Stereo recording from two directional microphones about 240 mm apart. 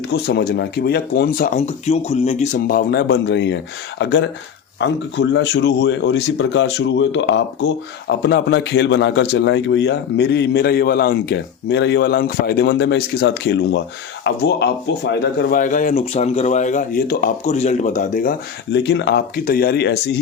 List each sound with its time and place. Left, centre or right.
0.1 s a man's voice: left